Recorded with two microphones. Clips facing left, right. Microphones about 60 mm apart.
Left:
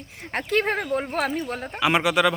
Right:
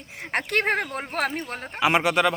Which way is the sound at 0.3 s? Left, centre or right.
Right.